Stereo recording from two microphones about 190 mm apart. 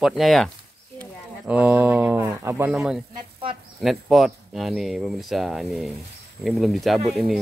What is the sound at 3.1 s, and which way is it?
Sizzle, 30° right (ahead or behind).